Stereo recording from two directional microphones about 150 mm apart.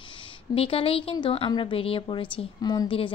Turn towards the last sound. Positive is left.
turn(degrees=30)  # may be behind; listen again after turning